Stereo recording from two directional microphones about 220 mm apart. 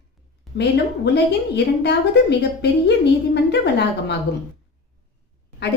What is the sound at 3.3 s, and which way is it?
Speech, 50° left (ahead or behind).